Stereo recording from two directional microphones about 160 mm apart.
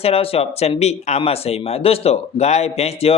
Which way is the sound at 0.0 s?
40° left (ahead or behind).